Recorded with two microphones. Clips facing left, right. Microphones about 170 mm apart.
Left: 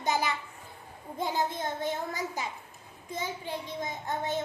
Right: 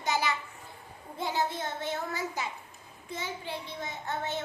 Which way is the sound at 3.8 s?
15° left (ahead or behind).